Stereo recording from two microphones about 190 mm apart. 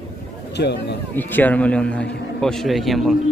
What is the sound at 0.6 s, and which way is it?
Speech, 60° left (ahead or behind).